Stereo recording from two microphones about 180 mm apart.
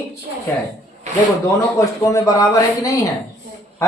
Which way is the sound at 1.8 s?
15° left (ahead or behind).